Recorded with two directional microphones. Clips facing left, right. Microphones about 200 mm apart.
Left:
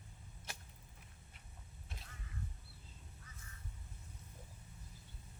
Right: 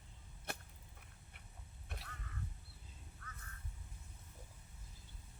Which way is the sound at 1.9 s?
65° right (ahead or behind).